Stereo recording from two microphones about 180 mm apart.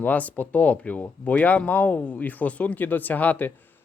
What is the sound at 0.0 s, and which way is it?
Speech, 10° left (ahead or behind).